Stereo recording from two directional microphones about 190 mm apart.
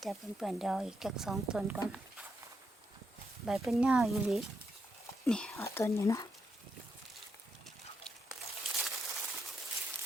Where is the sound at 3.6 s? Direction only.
5° right (ahead or behind).